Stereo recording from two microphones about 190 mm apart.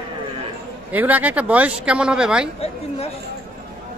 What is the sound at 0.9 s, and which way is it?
Speech, 10° right (ahead or behind).